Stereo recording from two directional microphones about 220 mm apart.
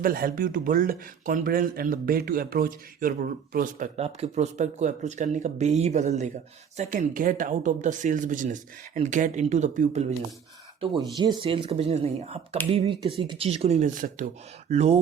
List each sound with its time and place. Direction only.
0.0 s speech: 40° right (ahead or behind)
11.3 s speech: 25° right (ahead or behind)